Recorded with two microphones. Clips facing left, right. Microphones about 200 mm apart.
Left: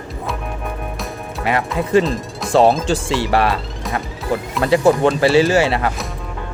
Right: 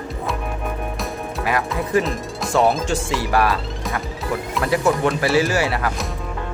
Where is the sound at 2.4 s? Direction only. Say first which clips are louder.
Left 5 dB; centre (ahead or behind).